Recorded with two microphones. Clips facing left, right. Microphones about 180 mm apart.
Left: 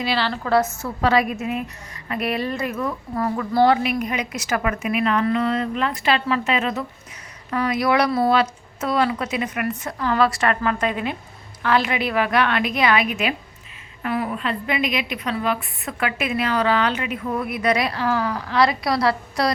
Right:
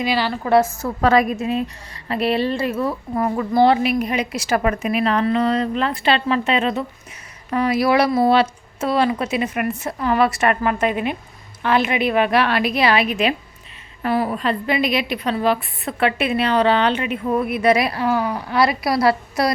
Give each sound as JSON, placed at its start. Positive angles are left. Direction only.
{"t": 0.0, "sound": "a woman's voice", "side_deg": -15}
{"t": 0.8, "sound": "a woman's voice", "side_deg": -45}
{"t": 1.4, "sound": "a woman's voice", "side_deg": -30}
{"t": 14.0, "sound": "a woman's voice", "side_deg": -35}